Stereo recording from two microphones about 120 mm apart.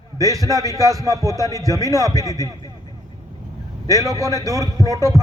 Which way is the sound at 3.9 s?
30° right (ahead or behind).